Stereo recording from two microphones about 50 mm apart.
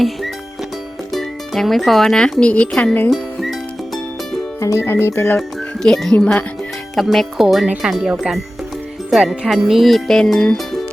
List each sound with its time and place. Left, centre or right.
1.1 s music: centre
2.4 s a woman's voice: left
3.1 s music: centre
4.8 s speech: left
5.4 s speech: centre
6.1 s a woman's voice: left
6.9 s music: centre
7.8 s speech: centre
9.5 s music: centre